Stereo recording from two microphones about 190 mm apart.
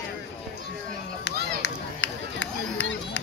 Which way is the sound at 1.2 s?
70° left (ahead or behind).